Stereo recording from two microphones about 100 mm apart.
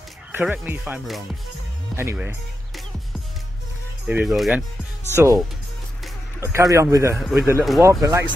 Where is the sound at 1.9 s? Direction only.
Centre (ahead or behind).